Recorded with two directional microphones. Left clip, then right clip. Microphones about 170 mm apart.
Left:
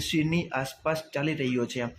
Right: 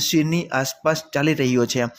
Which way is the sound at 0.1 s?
30° right (ahead or behind).